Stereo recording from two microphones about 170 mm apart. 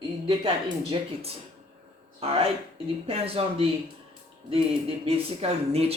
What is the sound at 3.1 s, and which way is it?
Speech, 35° right (ahead or behind).